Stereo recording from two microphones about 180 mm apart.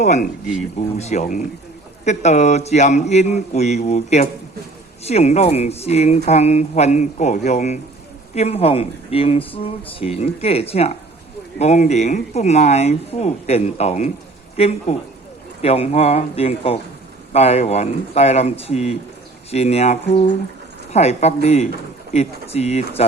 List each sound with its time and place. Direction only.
0.0 s a man's voice: 40° left (ahead or behind)